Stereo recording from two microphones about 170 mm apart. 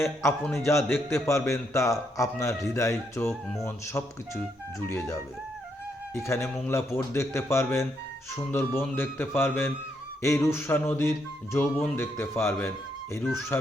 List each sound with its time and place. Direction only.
0.0 s a man's voice: 15° left (ahead or behind)
6.1 s a man's voice: 15° left (ahead or behind)